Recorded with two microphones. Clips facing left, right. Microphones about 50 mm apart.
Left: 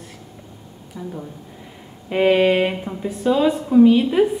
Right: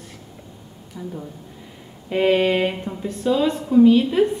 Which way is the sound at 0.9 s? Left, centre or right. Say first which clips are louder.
Left 1 dB; centre.